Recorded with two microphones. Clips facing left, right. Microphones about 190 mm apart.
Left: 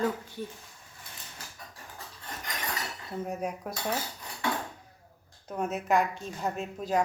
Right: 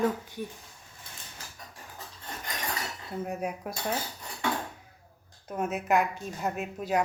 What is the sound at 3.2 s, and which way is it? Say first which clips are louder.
Speech: even; 5° right (ahead or behind).